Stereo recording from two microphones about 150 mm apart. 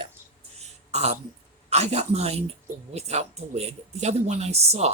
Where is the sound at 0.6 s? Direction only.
45° right (ahead or behind).